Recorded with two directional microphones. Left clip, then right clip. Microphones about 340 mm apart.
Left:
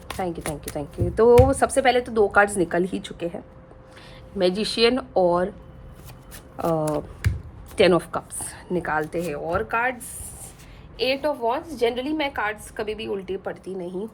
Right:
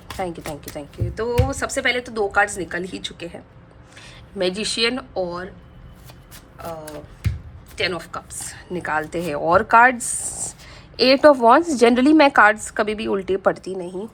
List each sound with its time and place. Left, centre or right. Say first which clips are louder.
0.1 s speech: right 1 dB; centre
7.8 s speech: left 6 dB; centre
10.9 s a woman's voice: right 11 dB; centre